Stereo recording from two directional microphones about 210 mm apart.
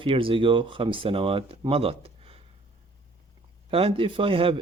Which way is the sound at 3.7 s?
25° right (ahead or behind).